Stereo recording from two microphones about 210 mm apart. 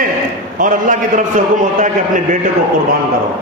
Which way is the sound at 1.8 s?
40° right (ahead or behind).